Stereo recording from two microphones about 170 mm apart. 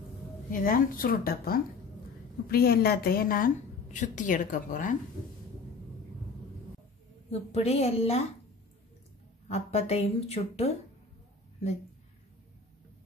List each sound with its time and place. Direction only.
0.5 s a woman's voice: 55° left (ahead or behind)
7.2 s speech: 40° left (ahead or behind)
9.5 s speech: 40° left (ahead or behind)